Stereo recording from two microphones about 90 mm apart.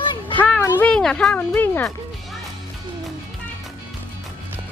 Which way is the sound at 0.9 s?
15° left (ahead or behind).